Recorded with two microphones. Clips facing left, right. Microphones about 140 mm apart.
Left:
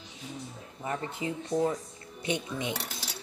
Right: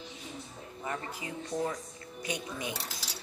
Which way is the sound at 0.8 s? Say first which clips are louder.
Left 5 dB; 25° left (ahead or behind).